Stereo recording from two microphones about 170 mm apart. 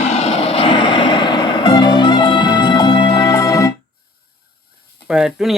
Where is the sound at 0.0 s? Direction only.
40° left (ahead or behind); by 3.8 s 20° left (ahead or behind).